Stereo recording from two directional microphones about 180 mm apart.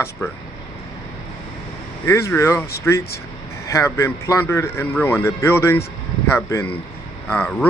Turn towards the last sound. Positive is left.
turn(degrees=5)  # may be behind; listen again after turning